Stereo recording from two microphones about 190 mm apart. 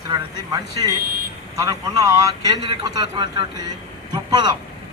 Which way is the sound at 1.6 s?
15° right (ahead or behind).